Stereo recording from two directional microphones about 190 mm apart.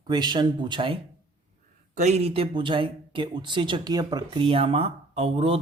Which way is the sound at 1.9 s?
35° right (ahead or behind).